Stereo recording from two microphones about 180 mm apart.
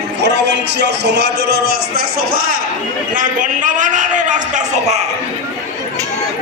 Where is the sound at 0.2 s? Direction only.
75° right (ahead or behind).